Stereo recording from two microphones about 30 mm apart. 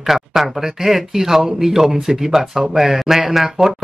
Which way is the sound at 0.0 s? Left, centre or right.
Centre.